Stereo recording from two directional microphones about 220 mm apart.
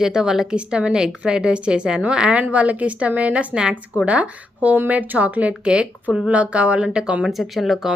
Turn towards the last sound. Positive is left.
turn(degrees=0)  # may be behind; listen again after turning